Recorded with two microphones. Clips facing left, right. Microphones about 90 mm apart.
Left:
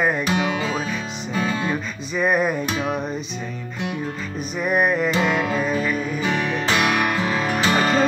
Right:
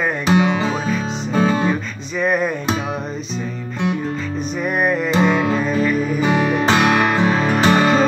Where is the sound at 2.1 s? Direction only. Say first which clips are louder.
Right 1 dB; 5° left (ahead or behind).